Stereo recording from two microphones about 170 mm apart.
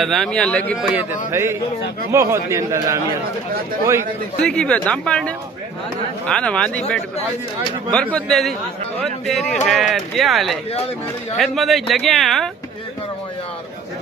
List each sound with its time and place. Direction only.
0.0 s speech: centre (ahead or behind)
0.9 s a man's voice: 15° right (ahead or behind)
4.4 s speech: 5° left (ahead or behind)
7.9 s speech: 5° left (ahead or behind)